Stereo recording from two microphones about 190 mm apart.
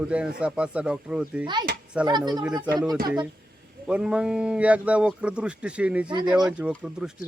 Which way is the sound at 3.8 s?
5° right (ahead or behind).